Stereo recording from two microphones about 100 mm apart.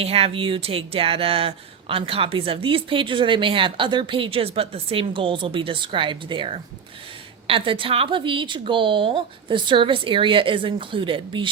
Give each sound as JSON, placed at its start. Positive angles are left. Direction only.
{"t": 0.0, "sound": "speech", "side_deg": -80}